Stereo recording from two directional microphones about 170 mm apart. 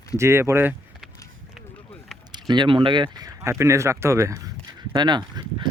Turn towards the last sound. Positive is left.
turn(degrees=-25)  # may be behind; listen again after turning